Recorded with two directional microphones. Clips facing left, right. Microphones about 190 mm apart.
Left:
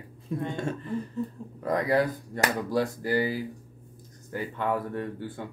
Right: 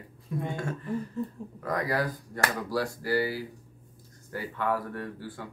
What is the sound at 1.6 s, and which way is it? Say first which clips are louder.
Speech: left 5 dB; 25° left (ahead or behind).